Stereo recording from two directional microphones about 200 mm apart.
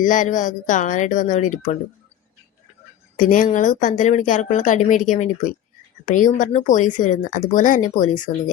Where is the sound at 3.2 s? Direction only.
40° left (ahead or behind).